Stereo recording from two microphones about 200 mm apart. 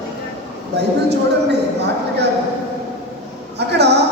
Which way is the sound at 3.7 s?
55° right (ahead or behind).